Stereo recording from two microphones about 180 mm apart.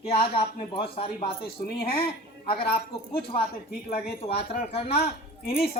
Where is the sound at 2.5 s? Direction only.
30° left (ahead or behind).